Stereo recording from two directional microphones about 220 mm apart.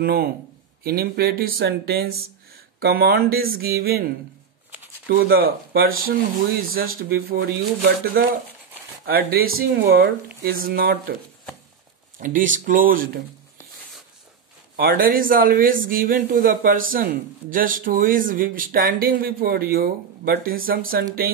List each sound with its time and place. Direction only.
0.0 s a man's voice: 45° right (ahead or behind)
12.2 s a man's voice: 35° right (ahead or behind)
14.8 s a man's voice: 40° right (ahead or behind)